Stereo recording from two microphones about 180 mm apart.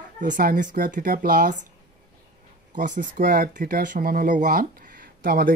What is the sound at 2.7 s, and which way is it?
Speech, 45° right (ahead or behind).